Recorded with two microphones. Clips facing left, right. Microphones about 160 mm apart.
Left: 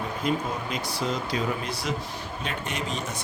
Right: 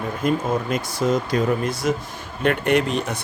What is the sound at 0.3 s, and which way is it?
Speech, 50° right (ahead or behind).